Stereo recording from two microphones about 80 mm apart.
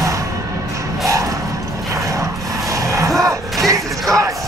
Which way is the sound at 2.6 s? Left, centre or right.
Right.